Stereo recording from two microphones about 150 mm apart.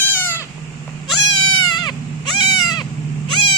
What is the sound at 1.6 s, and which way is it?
Goat, 30° left (ahead or behind).